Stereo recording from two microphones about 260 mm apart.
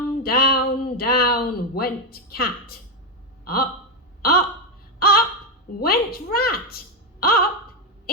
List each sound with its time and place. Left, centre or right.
0.2 s speech: left
4.2 s a sound: left
5.8 s speech: left